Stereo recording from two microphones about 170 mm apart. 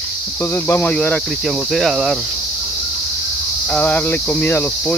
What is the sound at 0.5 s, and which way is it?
Speech, 15° left (ahead or behind).